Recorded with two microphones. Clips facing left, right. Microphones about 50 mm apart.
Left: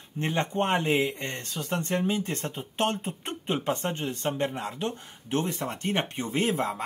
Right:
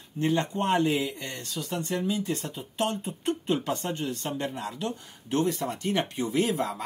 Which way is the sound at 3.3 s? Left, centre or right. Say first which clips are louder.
Right 2 dB; left.